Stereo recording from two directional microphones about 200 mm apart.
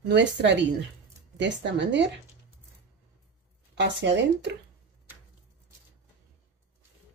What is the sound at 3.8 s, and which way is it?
Speech, 60° right (ahead or behind).